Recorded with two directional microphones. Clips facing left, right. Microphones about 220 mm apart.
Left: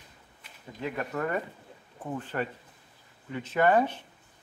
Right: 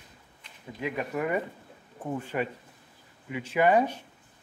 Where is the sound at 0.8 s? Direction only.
15° right (ahead or behind).